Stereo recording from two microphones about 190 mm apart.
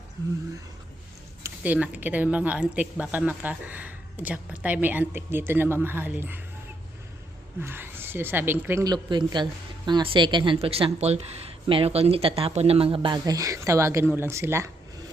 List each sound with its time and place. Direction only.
0.2 s speech: 20° right (ahead or behind)
1.5 s speech: 10° right (ahead or behind)
7.6 s speech: 10° right (ahead or behind)